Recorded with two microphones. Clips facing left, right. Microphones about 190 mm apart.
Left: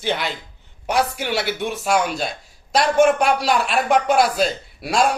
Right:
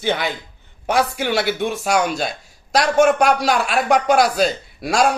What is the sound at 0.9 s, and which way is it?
A man's voice, centre (ahead or behind).